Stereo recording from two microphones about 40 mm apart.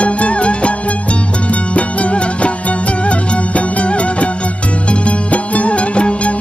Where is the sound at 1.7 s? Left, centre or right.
Left.